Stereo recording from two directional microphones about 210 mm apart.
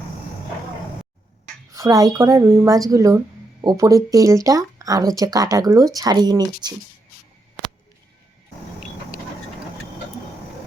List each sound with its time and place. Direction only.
1.7 s speech: 15° right (ahead or behind)